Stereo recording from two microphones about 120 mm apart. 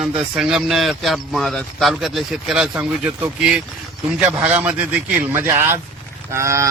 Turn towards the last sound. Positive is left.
turn(degrees=-25)  # may be behind; listen again after turning